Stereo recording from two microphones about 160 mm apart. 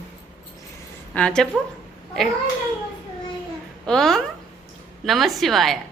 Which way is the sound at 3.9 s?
5° left (ahead or behind).